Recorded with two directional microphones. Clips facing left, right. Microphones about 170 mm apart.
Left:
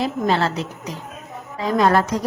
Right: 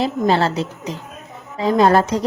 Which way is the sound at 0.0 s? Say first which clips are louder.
Right 3 dB; 30° right (ahead or behind).